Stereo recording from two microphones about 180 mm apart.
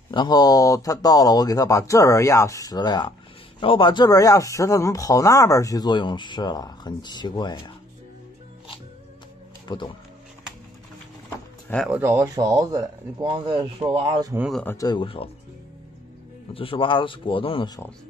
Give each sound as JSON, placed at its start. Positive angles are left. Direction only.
{"t": 0.1, "sound": "speech", "side_deg": 25}
{"t": 9.7, "sound": "speech", "side_deg": 25}
{"t": 11.7, "sound": "speech", "side_deg": 0}
{"t": 12.0, "sound": "speech", "side_deg": -15}
{"t": 14.5, "sound": "speech", "side_deg": 10}
{"t": 14.8, "sound": "speech", "side_deg": 25}
{"t": 16.5, "sound": "speech", "side_deg": 30}